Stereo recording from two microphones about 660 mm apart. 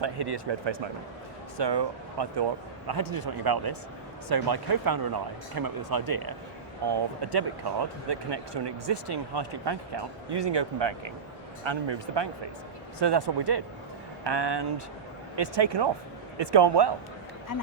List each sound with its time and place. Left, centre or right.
0.0 s speech: right